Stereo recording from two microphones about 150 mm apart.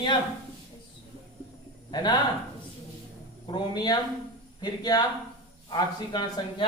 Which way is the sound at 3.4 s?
30° left (ahead or behind).